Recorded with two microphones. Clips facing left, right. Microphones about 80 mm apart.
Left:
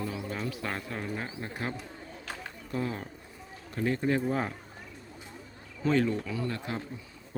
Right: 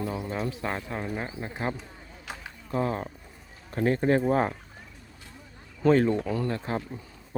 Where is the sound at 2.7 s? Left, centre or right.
Right.